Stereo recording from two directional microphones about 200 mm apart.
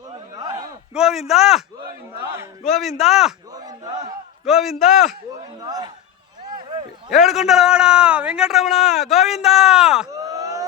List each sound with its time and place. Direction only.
0.3 s a sound: 20° right (ahead or behind)
0.9 s a man's voice: centre (ahead or behind)
2.6 s a man's voice: centre (ahead or behind)
3.5 s battle cry: 20° right (ahead or behind)
4.4 s a man's voice: centre (ahead or behind)
5.5 s a man's voice: 20° right (ahead or behind)
7.1 s a man's voice: centre (ahead or behind)
10.1 s a sound: 15° right (ahead or behind)